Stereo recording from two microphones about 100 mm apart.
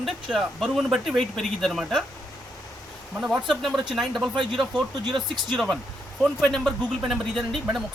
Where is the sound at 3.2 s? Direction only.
10° right (ahead or behind).